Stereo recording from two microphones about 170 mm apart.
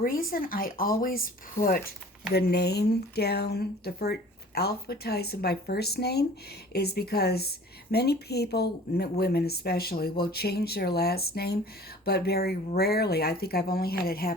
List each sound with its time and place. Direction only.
0.0 s speech: 60° left (ahead or behind)
2.3 s a woman's voice: 70° left (ahead or behind)